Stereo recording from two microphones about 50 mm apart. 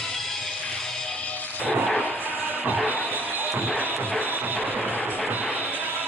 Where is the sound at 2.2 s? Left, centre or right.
Right.